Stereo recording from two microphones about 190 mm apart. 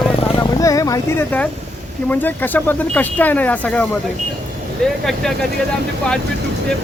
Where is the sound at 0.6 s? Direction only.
15° left (ahead or behind).